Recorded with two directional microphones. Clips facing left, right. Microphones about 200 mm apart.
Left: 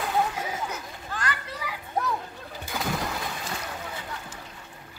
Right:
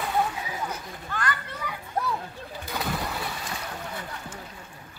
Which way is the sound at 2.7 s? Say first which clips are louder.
Left 1 dB; centre (ahead or behind).